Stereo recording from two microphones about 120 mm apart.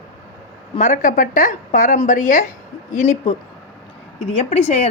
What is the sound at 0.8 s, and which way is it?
A woman's voice, 90° left.